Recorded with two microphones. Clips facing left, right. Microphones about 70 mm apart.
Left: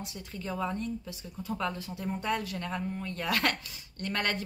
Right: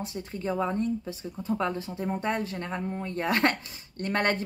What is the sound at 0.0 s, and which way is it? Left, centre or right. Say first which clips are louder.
Speech: right 7 dB; right.